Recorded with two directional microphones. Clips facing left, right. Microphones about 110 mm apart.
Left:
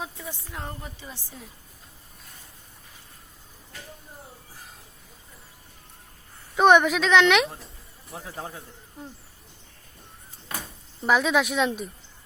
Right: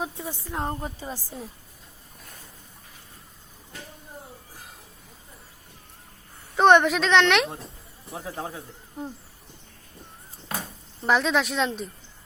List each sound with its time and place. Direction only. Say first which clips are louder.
0.0 s a woman's voice: right 4 dB; 30° right (ahead or behind)
6.6 s a woman's voice: even; 5° left (ahead or behind)
8.2 s a man's voice: right 3 dB; 20° right (ahead or behind)
11.0 s a woman's voice: left 1 dB; 5° left (ahead or behind)